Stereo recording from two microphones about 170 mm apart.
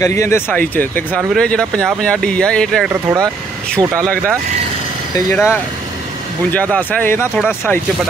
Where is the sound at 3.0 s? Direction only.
20° right (ahead or behind).